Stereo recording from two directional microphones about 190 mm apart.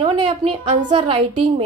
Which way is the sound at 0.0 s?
25° right (ahead or behind).